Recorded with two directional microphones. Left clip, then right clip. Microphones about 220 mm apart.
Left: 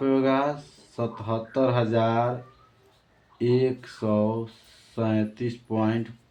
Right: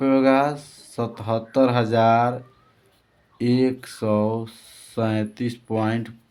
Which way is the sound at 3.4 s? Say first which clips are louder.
Right 2 dB; 55° right (ahead or behind).